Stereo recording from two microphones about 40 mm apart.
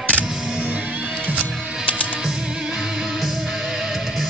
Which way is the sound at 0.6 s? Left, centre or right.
Right.